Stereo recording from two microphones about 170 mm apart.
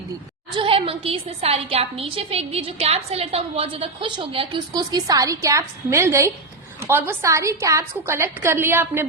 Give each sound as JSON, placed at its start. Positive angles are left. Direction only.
{"t": 0.5, "sound": "a woman's voice", "side_deg": -30}